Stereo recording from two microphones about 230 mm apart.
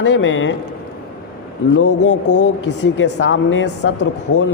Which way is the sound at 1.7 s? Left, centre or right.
Left.